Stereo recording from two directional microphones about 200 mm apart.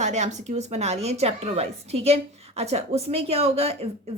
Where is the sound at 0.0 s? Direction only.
35° right (ahead or behind).